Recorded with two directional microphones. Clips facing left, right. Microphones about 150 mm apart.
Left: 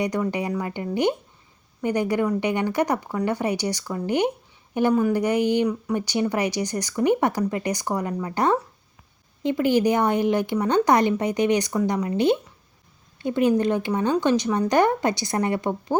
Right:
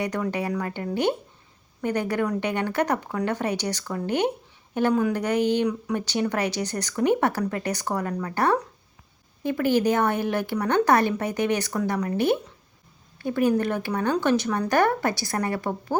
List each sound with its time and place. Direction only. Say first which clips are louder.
0.0 s a woman's voice: left 2 dB; 10° left (ahead or behind)